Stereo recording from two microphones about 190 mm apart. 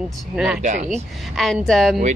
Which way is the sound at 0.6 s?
40° right (ahead or behind).